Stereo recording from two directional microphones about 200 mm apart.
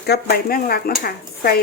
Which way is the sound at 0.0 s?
55° left (ahead or behind).